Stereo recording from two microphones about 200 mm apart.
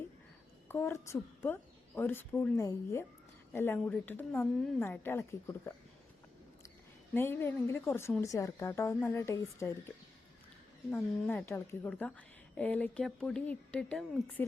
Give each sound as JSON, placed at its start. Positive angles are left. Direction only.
{"t": 0.7, "sound": "speech", "side_deg": 10}
{"t": 7.1, "sound": "speech", "side_deg": 10}
{"t": 10.9, "sound": "speech", "side_deg": 10}